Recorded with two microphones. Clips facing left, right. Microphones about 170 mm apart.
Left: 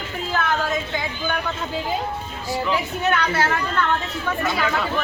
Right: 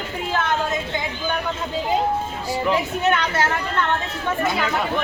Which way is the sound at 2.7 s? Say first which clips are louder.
Right 2 dB; 20° right (ahead or behind).